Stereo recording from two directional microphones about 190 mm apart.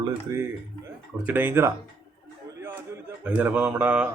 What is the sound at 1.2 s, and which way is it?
Speech, 10° right (ahead or behind).